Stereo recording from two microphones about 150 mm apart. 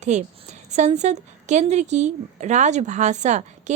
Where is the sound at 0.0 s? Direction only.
50° right (ahead or behind).